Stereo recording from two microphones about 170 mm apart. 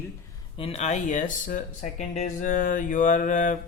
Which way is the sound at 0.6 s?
35° left (ahead or behind).